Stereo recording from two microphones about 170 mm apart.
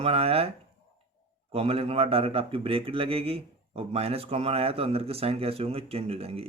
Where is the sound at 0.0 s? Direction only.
35° right (ahead or behind).